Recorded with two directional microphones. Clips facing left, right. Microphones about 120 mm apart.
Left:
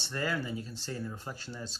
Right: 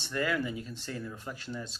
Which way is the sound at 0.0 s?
35° left (ahead or behind).